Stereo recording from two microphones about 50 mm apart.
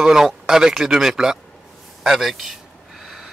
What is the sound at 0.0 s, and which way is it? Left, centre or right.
A man's voice, centre.